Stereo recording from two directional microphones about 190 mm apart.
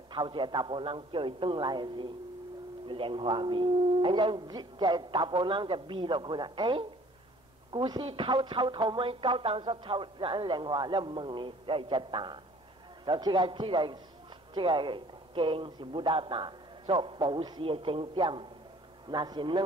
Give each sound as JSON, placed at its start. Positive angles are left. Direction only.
{"t": 0.1, "sound": "speech", "side_deg": -25}